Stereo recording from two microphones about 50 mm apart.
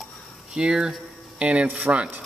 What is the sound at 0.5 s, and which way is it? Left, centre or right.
Speech, centre.